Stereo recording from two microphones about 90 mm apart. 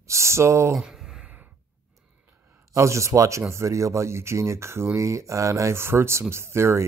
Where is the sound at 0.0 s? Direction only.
30° right (ahead or behind).